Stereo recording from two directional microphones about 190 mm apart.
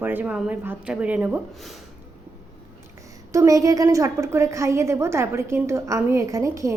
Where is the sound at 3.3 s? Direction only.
15° right (ahead or behind).